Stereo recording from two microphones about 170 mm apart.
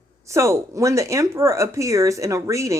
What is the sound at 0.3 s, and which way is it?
Speech, 15° right (ahead or behind).